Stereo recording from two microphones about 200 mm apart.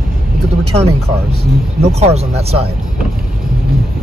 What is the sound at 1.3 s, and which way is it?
Speech, 30° right (ahead or behind).